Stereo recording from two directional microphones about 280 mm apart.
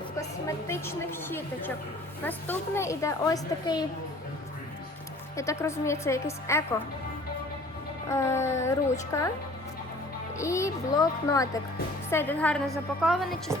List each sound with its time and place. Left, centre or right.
0.2 s a woman's voice: centre
5.4 s a woman's voice: centre
8.1 s a woman's voice: centre
10.3 s a woman's voice: centre